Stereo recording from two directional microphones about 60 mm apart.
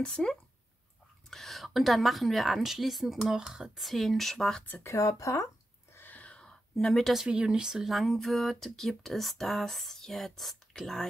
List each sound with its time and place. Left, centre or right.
0.0 s speech: centre
3.7 s speech: centre
4.8 s speech: left
5.9 s a sound: left; by 7.2 s centre
7.2 s speech: centre
7.9 s speech: centre